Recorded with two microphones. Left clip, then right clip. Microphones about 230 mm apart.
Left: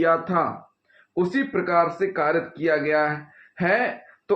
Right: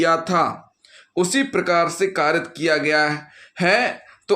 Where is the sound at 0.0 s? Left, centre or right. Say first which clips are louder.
Right 3 dB; right.